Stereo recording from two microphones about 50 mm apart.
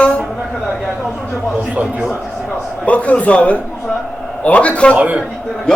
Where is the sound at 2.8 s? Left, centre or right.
Left.